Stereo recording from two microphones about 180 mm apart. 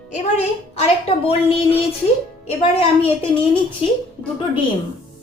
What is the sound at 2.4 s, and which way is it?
A woman's voice, 30° left (ahead or behind).